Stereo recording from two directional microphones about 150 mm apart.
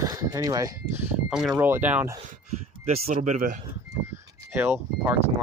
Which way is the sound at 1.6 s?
15° right (ahead or behind).